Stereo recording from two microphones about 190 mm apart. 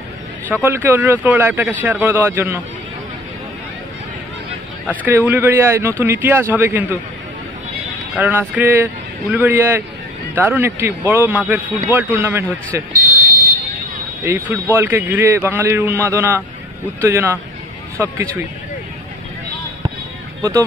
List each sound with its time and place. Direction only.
0.5 s a man's voice: 10° right (ahead or behind)
5.0 s a man's voice: 10° right (ahead or behind)
8.2 s a man's voice: 10° right (ahead or behind)
14.2 s a man's voice: 10° right (ahead or behind)